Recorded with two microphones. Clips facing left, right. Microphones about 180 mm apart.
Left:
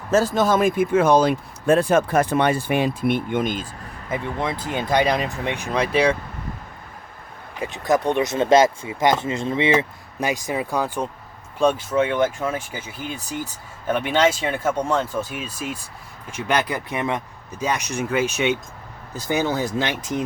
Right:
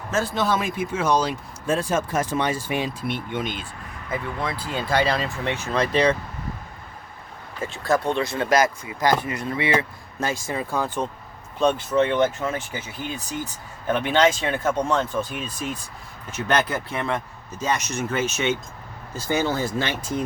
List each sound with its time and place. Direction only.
0.1 s speech: 40° left (ahead or behind)
4.1 s speech: 20° left (ahead or behind)
7.6 s speech: 20° left (ahead or behind)